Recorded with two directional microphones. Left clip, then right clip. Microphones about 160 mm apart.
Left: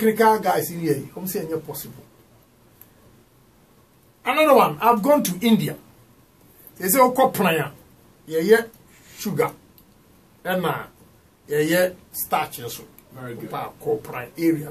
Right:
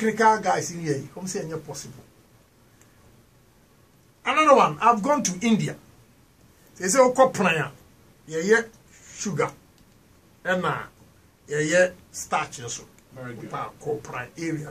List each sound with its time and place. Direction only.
0.0 s speech: 15° left (ahead or behind)
4.2 s speech: 15° left (ahead or behind)
6.8 s speech: 15° left (ahead or behind)
10.4 s speech: 15° left (ahead or behind)